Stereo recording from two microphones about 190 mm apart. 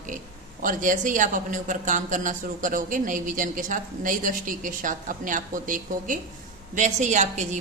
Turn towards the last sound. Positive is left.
turn(degrees=-40)  # may be behind; listen again after turning